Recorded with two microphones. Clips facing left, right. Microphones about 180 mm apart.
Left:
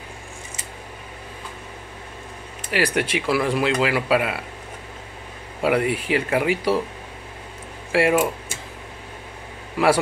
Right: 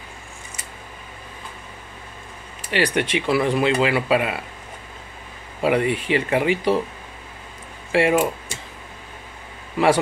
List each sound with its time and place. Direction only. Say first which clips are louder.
2.7 s speech: right 1 dB; 5° left (ahead or behind)
5.6 s speech: right 1 dB; 5° left (ahead or behind)
7.9 s speech: right 1 dB; 5° left (ahead or behind)